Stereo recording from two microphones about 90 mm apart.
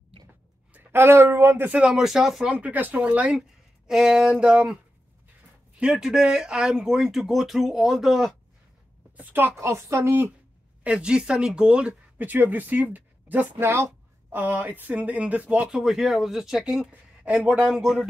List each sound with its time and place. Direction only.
0.7 s speech: 25° right (ahead or behind)
1.7 s speech: 10° right (ahead or behind)
5.8 s speech: 10° right (ahead or behind)
9.1 s a woman's voice: 20° right (ahead or behind)
10.8 s speech: 10° right (ahead or behind)
16.9 s a sound: 15° right (ahead or behind)
17.5 s speech: 10° right (ahead or behind)